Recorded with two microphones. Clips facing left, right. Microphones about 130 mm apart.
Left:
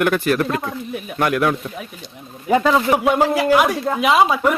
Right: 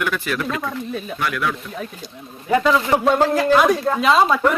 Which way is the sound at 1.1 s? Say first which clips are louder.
Left 7 dB; 50° left (ahead or behind).